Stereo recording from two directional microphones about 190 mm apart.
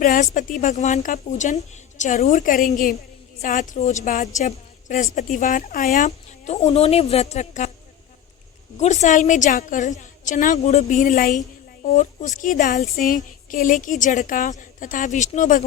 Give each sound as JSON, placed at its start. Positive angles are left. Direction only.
{"t": 0.0, "sound": "a woman's voice", "side_deg": 45}
{"t": 8.8, "sound": "a woman's voice", "side_deg": 35}